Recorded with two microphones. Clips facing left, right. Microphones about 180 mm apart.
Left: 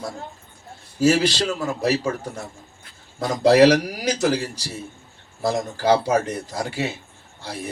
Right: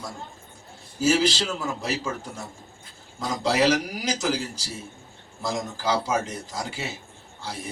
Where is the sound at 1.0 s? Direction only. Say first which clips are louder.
Left 3 dB; 65° left (ahead or behind).